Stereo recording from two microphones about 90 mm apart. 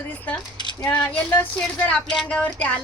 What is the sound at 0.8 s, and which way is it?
Speech, 15° left (ahead or behind).